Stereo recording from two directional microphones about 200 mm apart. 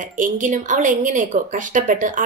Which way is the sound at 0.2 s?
40° right (ahead or behind).